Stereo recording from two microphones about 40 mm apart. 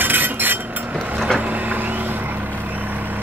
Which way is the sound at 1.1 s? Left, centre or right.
Centre.